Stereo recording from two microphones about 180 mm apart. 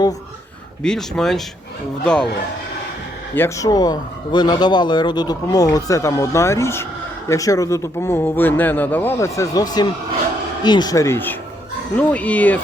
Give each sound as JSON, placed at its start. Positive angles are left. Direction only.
{"t": 0.8, "sound": "speech", "side_deg": 5}
{"t": 3.3, "sound": "speech", "side_deg": 15}